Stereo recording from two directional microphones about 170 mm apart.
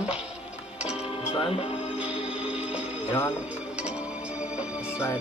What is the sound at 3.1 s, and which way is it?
Speech, 15° left (ahead or behind).